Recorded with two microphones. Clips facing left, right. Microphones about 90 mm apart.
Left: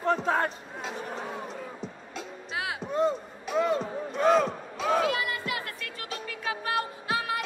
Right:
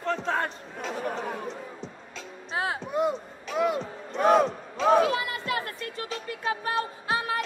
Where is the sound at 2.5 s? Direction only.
35° right (ahead or behind).